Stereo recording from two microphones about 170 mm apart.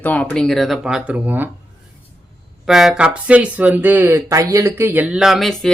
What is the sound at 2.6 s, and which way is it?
Speech, centre (ahead or behind).